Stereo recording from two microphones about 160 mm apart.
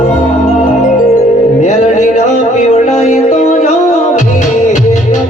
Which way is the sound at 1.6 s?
50° left (ahead or behind).